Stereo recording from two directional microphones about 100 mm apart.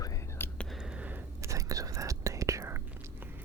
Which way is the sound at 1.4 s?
35° right (ahead or behind).